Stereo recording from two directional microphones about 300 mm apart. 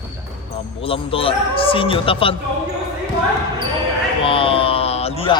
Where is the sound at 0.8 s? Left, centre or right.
Centre.